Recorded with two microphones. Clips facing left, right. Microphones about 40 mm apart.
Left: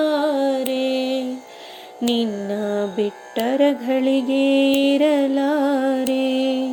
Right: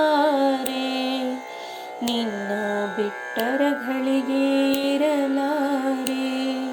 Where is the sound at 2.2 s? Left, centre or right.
Right.